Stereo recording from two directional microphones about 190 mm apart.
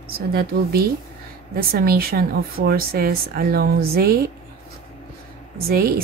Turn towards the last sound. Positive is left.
turn(degrees=-50)  # may be behind; listen again after turning